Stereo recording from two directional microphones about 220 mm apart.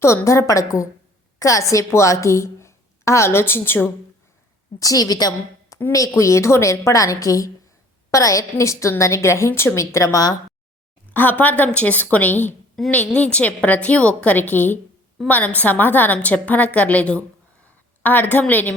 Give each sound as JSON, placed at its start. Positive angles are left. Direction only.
{"t": 0.0, "sound": "a woman's voice", "side_deg": 10}